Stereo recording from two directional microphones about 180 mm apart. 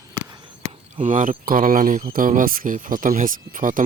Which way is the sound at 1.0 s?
45° right (ahead or behind).